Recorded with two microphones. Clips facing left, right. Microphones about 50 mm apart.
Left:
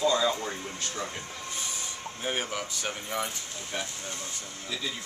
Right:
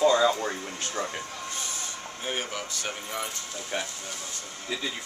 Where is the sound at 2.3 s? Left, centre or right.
Centre.